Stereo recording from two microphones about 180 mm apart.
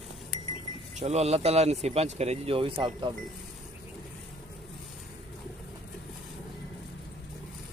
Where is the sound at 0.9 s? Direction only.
35° right (ahead or behind).